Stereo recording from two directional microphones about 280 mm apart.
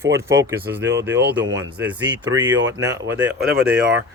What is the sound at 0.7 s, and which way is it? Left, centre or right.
A man's voice, centre.